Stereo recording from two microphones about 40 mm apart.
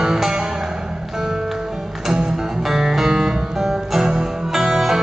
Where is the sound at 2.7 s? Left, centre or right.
Centre.